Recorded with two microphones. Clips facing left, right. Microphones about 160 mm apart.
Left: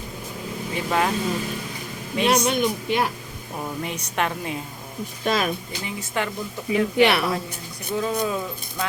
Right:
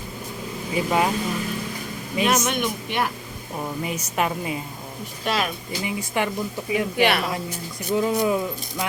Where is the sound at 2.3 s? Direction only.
35° left (ahead or behind).